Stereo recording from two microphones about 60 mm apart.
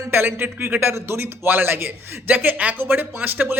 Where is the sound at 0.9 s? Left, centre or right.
Right.